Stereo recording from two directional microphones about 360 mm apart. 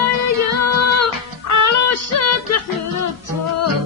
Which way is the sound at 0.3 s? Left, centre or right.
Left.